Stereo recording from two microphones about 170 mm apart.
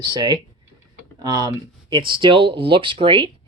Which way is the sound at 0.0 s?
25° right (ahead or behind).